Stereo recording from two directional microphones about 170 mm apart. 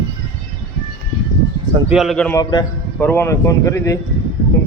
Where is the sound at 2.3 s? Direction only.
15° left (ahead or behind).